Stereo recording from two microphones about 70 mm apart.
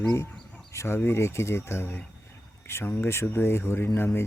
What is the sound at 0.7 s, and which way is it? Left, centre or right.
Speech, left.